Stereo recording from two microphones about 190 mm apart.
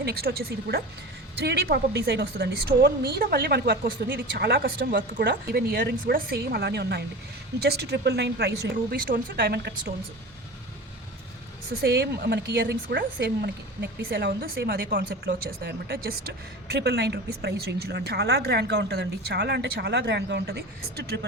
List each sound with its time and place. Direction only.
0.0 s a woman's voice: 55° right (ahead or behind)
11.8 s a woman's voice: 60° right (ahead or behind)